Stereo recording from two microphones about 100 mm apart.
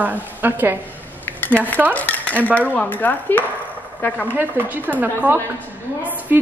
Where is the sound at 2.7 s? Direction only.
15° left (ahead or behind).